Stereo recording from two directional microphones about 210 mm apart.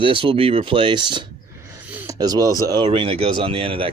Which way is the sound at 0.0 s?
25° right (ahead or behind).